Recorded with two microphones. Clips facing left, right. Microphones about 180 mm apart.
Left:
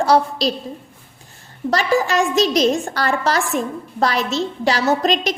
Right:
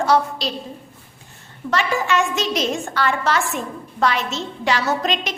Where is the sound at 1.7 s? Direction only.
35° left (ahead or behind).